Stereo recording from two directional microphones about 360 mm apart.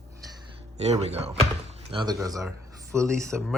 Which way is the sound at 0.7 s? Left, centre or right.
Centre.